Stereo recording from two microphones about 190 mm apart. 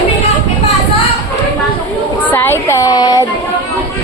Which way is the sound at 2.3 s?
10° left (ahead or behind).